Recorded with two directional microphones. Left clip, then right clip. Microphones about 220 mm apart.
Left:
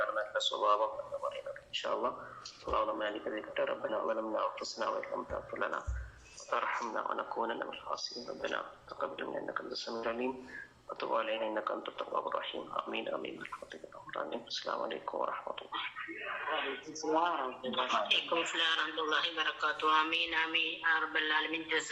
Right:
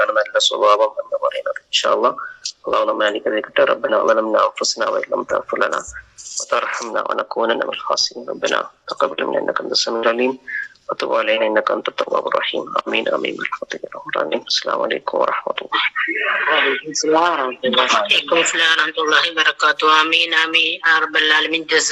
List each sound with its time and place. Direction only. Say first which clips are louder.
0.0 s a man's voice: right 18 dB; 50° right (ahead or behind)